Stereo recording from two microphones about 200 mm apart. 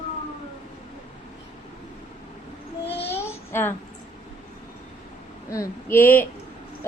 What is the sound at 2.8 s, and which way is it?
Babbling, 30° left (ahead or behind).